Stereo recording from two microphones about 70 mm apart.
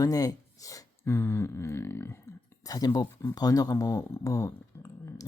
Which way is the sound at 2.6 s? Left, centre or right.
Left.